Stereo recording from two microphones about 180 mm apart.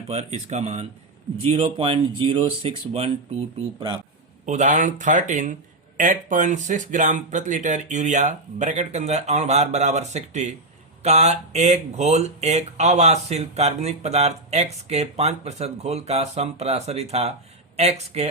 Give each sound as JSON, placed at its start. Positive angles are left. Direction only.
{"t": 0.1, "sound": "speech", "side_deg": -35}
{"t": 4.4, "sound": "speech", "side_deg": -40}